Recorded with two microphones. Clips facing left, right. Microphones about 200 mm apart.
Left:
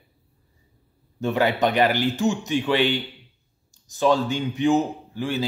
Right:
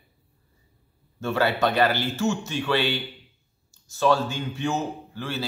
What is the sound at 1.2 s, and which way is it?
Speech, 15° left (ahead or behind).